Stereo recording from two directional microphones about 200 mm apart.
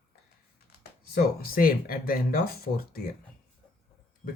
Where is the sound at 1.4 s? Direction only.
45° left (ahead or behind).